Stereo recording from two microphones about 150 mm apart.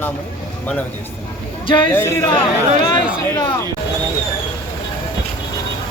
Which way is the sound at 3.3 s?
20° left (ahead or behind).